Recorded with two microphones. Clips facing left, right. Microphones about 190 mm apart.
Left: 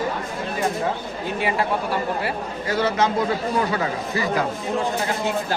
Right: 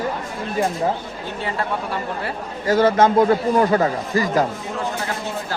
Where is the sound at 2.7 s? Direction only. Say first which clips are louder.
Right 6 dB; 50° right (ahead or behind).